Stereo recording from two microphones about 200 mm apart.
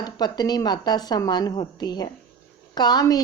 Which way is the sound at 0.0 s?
20° left (ahead or behind).